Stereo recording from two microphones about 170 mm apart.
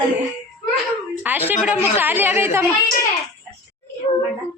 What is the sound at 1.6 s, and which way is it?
A woman's voice, 10° right (ahead or behind).